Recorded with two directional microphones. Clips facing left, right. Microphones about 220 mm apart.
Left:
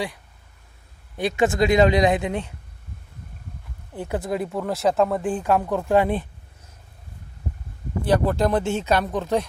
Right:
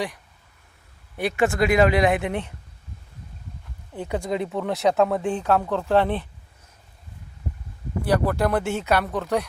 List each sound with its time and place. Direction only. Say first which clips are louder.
1.2 s speech: left 1 dB; 20° left (ahead or behind)
4.1 s speech: even; 5° left (ahead or behind)
8.0 s speech: left 2 dB; 20° left (ahead or behind)